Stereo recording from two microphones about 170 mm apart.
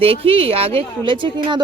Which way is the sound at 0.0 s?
35° right (ahead or behind).